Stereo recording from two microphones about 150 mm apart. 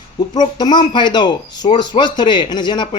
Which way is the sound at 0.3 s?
30° left (ahead or behind).